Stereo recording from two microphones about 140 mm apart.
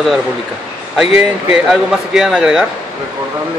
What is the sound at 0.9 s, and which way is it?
Speech, 5° right (ahead or behind).